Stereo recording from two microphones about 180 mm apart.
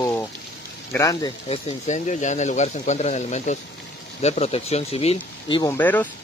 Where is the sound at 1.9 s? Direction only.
40° left (ahead or behind); by 5.7 s 25° left (ahead or behind).